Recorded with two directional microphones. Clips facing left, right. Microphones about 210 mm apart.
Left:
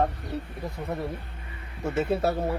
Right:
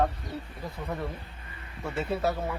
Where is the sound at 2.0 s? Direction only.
30° left (ahead or behind).